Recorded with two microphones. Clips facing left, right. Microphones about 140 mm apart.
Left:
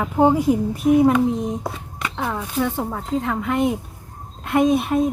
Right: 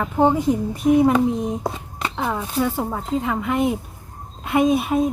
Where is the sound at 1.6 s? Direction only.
30° right (ahead or behind).